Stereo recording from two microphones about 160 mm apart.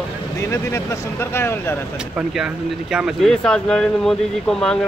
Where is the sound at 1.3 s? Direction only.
15° left (ahead or behind).